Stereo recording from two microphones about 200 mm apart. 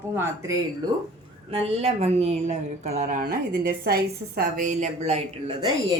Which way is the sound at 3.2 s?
50° right (ahead or behind).